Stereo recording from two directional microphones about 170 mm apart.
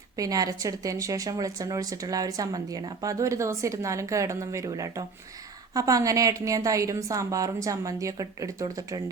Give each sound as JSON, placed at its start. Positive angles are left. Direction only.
{"t": 0.2, "sound": "speech", "side_deg": -20}